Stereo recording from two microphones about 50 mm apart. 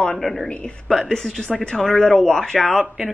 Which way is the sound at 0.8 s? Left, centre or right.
Centre.